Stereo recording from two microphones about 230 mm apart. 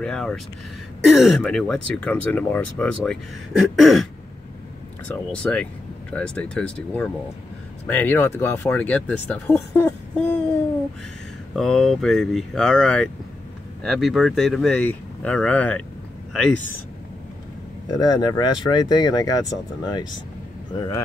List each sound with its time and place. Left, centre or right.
0.0 s speech: centre
11.5 s speech: centre
17.9 s speech: centre